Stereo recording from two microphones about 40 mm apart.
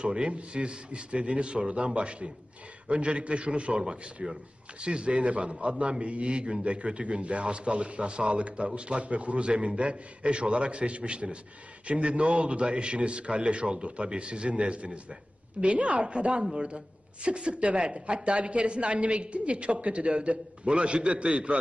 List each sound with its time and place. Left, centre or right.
0.0 s a man's voice: right